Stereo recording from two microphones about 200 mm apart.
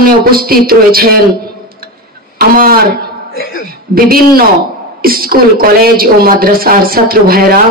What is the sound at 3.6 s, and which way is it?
A woman's voice, 45° right (ahead or behind).